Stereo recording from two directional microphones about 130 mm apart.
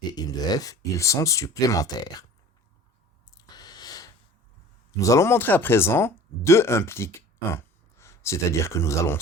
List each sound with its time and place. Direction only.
0.1 s speech: 30° left (ahead or behind)
3.3 s a sound: 30° left (ahead or behind)
4.9 s speech: 25° left (ahead or behind)